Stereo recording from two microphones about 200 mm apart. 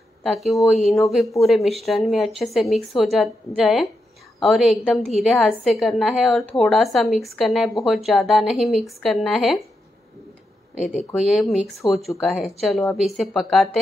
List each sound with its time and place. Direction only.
0.2 s a woman's voice: centre (ahead or behind)
11.3 s a woman's voice: centre (ahead or behind)